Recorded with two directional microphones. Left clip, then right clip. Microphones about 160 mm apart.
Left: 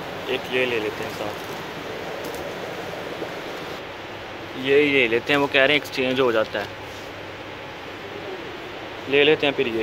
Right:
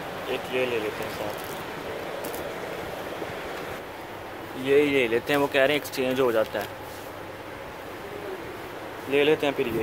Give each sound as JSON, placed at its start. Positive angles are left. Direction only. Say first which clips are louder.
{"t": 0.3, "sound": "speech", "louder": "left 4 dB", "side_deg": -5}
{"t": 4.6, "sound": "speech", "louder": "left 4 dB", "side_deg": -20}
{"t": 9.1, "sound": "speech", "louder": "left 4 dB", "side_deg": -10}